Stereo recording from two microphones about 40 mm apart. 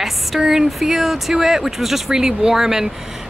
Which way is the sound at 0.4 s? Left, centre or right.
Centre.